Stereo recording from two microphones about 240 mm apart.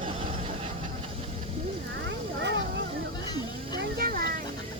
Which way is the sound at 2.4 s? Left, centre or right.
Right.